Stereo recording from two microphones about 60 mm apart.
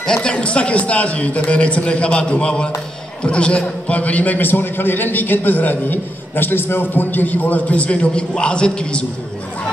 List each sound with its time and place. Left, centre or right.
0.0 s a man's voice: centre